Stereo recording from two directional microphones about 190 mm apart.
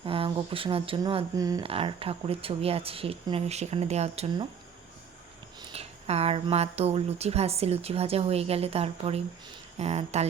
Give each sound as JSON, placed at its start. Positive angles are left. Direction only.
{"t": 0.0, "sound": "speech", "side_deg": -30}
{"t": 1.6, "sound": "speech", "side_deg": -30}
{"t": 5.7, "sound": "speech", "side_deg": -30}